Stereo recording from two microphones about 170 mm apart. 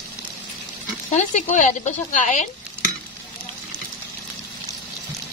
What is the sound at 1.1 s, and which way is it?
A woman's voice, 45° left (ahead or behind).